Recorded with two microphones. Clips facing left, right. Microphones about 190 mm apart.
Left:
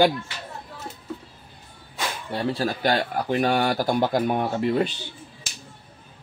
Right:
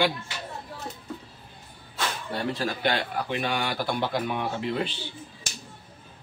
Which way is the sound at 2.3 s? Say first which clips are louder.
Left 5 dB; 35° left (ahead or behind).